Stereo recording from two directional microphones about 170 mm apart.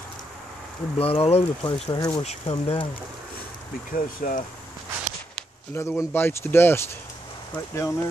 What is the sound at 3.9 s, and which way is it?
Speech, 50° left (ahead or behind).